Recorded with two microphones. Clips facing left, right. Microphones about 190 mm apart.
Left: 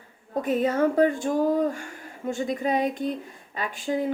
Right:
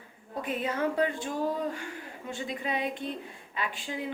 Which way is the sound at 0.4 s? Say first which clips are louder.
Left 8 dB; 45° left (ahead or behind).